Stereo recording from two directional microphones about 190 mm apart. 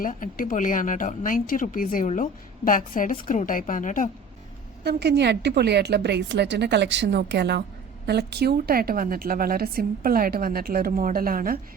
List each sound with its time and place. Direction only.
0.0 s speech: 45° left (ahead or behind)
4.8 s a woman's voice: 60° right (ahead or behind)